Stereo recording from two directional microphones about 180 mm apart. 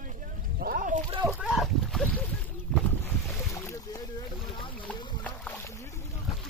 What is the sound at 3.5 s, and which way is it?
Boat, 15° left (ahead or behind).